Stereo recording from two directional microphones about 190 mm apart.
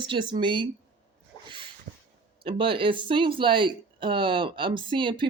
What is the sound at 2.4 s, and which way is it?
Speech, 25° right (ahead or behind).